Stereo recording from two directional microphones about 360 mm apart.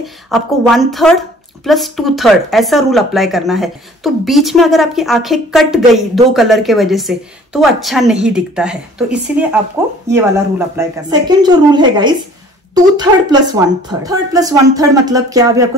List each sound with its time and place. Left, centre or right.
0.0 s a woman's voice: centre
10.8 s a woman's voice: centre